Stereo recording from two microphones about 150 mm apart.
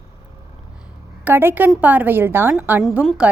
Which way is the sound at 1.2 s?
15° right (ahead or behind).